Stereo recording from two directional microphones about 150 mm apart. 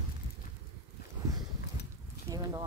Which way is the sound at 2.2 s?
25° right (ahead or behind).